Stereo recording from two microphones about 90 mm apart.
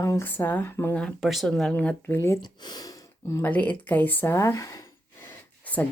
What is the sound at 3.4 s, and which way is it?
Speech, 20° left (ahead or behind).